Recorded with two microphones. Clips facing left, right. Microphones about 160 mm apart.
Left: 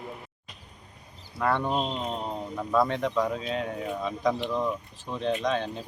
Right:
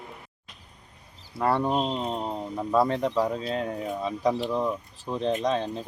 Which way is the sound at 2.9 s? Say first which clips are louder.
Right 2 dB; 35° right (ahead or behind).